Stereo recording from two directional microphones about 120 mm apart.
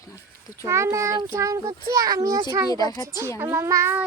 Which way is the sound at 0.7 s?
25° right (ahead or behind).